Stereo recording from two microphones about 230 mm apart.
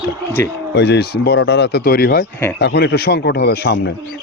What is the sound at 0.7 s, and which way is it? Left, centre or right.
A man's voice, left.